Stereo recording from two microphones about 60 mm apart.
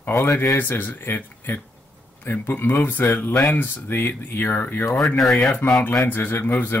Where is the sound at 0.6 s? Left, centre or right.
Left.